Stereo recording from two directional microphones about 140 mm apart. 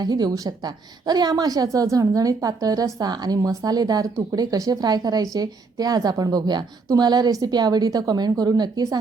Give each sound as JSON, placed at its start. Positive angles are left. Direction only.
{"t": 0.0, "sound": "a woman's voice", "side_deg": -30}